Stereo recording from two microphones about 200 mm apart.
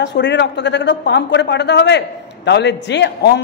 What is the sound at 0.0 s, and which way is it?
Speech, 60° left (ahead or behind).